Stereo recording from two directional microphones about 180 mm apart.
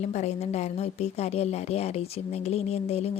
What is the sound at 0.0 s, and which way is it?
A woman's voice, 40° left (ahead or behind).